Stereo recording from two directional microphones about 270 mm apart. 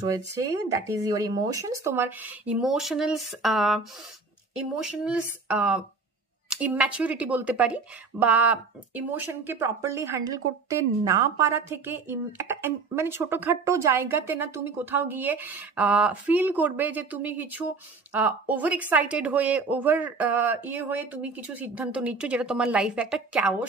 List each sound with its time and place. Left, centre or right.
0.7 s speech: centre